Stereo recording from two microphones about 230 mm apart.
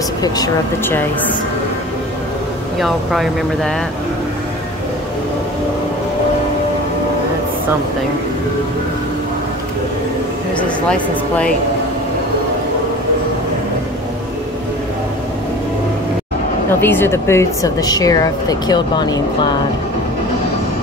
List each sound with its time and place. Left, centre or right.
0.2 s speech: centre
2.8 s speech: centre
10.9 s speech: centre
16.8 s speech: centre